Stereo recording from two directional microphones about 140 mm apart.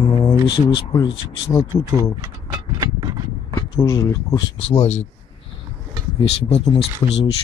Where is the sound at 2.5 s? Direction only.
30° right (ahead or behind).